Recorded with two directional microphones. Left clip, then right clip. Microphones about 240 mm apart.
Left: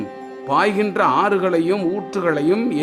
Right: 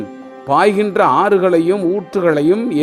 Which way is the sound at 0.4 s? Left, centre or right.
Right.